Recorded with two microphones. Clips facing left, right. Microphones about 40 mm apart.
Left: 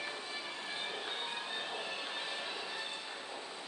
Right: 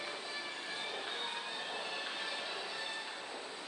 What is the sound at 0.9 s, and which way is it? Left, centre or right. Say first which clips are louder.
Train: even; centre.